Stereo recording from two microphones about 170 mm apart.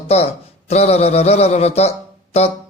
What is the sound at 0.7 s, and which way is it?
A man's voice, 40° left (ahead or behind).